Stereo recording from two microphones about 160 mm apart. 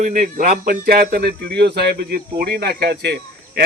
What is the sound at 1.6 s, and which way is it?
Speech, 85° right.